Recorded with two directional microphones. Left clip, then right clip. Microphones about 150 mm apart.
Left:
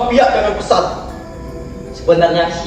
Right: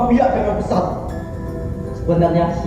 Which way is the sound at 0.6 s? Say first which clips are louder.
Left 6 dB; 65° right (ahead or behind).